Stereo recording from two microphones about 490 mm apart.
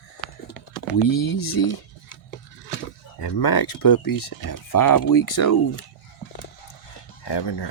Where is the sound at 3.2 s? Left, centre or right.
Left.